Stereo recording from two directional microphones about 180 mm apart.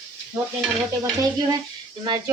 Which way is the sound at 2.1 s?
25° right (ahead or behind).